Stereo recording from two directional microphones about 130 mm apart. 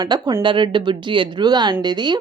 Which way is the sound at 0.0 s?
35° right (ahead or behind).